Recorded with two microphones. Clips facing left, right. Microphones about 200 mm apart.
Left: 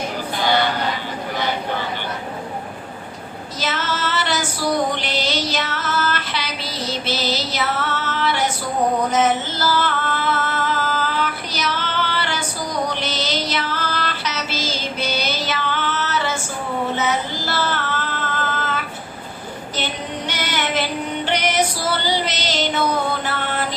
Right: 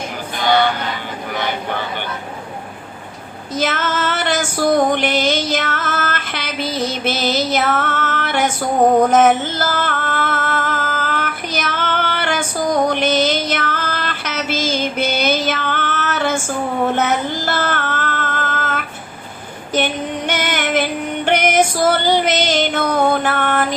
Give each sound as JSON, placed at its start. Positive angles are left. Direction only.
{"t": 3.6, "sound": "female singing", "side_deg": -50}
{"t": 9.0, "sound": "music", "side_deg": -50}
{"t": 16.8, "sound": "child singing", "side_deg": -55}
{"t": 19.7, "sound": "female singing", "side_deg": -55}